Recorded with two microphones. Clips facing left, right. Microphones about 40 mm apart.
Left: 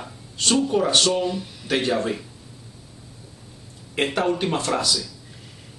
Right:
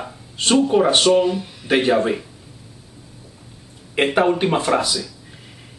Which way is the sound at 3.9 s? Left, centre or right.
Right.